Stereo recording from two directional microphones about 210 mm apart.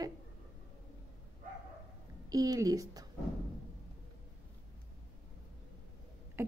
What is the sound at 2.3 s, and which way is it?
Speech, 15° right (ahead or behind).